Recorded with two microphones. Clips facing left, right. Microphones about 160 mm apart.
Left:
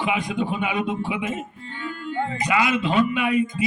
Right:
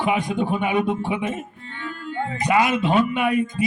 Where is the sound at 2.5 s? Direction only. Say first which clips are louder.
Right 4 dB; 45° right (ahead or behind).